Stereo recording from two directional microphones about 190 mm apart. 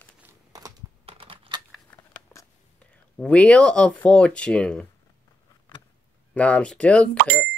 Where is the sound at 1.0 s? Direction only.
30° right (ahead or behind).